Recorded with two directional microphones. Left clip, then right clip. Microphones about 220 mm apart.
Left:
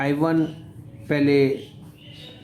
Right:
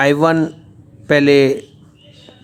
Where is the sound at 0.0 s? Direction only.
45° right (ahead or behind).